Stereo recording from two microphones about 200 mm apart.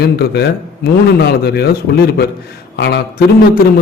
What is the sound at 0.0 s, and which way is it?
A man's voice, 55° left (ahead or behind).